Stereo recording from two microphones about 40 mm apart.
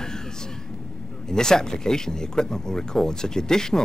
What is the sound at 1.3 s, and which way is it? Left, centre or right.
Speech, centre.